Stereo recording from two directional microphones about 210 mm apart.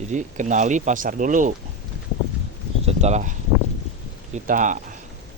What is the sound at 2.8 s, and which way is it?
Speech, 35° right (ahead or behind).